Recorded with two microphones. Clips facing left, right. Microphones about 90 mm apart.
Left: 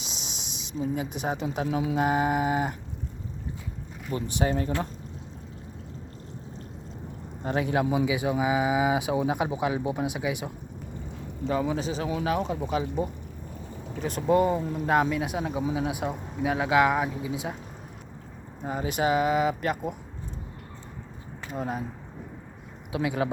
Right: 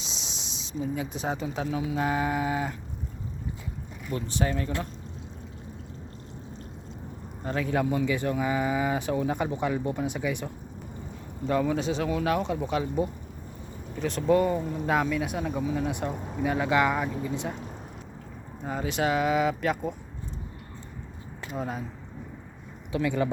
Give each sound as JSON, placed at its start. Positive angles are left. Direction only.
{"t": 0.0, "sound": "a sound", "side_deg": 10}
{"t": 1.5, "sound": "speech", "side_deg": 20}
{"t": 4.1, "sound": "speech", "side_deg": 15}
{"t": 4.4, "sound": "speech", "side_deg": 30}
{"t": 7.7, "sound": "speech", "side_deg": 5}
{"t": 18.6, "sound": "speech", "side_deg": 5}
{"t": 21.5, "sound": "speech", "side_deg": 0}
{"t": 22.9, "sound": "speech", "side_deg": 10}